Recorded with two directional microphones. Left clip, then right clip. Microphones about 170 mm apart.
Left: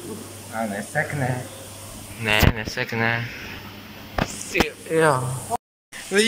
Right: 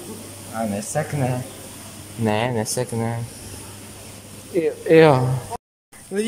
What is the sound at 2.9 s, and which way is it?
Speech, 10° right (ahead or behind).